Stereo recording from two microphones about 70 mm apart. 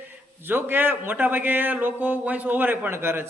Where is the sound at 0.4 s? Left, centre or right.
Right.